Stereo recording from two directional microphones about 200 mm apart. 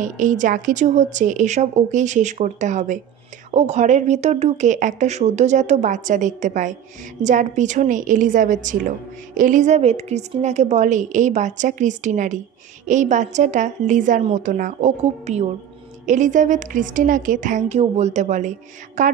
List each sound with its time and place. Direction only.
0.0 s speech: 40° right (ahead or behind)